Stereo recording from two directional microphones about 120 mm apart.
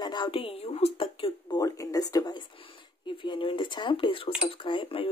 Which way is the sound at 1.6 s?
30° left (ahead or behind).